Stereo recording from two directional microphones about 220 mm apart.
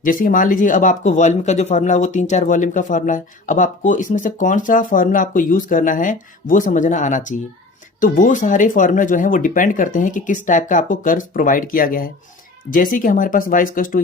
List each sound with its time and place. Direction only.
0.0 s speech: 40° left (ahead or behind)